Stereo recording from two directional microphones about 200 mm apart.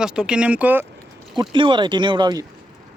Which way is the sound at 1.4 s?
25° right (ahead or behind).